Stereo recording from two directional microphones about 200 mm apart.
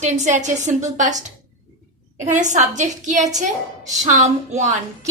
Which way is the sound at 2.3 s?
40° right (ahead or behind).